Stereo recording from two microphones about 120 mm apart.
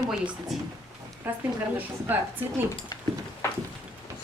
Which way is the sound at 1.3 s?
15° right (ahead or behind).